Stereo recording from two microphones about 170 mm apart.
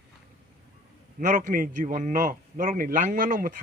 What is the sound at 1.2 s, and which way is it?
A man's voice, 50° right (ahead or behind).